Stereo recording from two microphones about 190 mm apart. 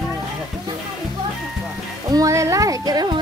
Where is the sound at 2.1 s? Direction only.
15° right (ahead or behind).